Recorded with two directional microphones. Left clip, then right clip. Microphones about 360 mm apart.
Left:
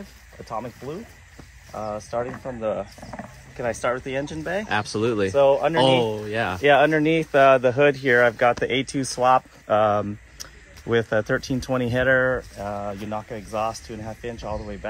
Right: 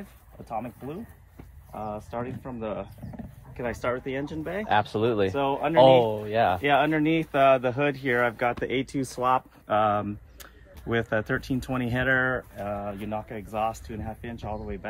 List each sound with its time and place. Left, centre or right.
1.8 s speech: left
4.6 s speech: centre
5.3 s speech: left
5.8 s speech: centre
6.6 s speech: left